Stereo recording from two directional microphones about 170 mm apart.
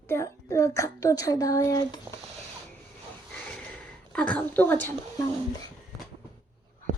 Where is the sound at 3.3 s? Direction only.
5° left (ahead or behind).